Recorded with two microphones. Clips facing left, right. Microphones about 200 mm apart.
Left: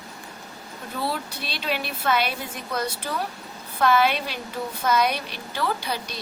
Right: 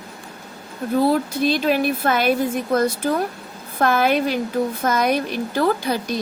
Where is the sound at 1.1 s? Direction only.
45° right (ahead or behind).